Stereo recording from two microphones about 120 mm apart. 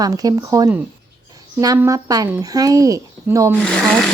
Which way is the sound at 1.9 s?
30° right (ahead or behind).